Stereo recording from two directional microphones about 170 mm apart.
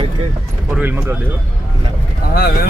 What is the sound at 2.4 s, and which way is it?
Speech, 65° left (ahead or behind).